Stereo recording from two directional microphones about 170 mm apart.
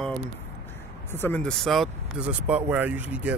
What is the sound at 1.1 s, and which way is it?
Speech, 10° left (ahead or behind).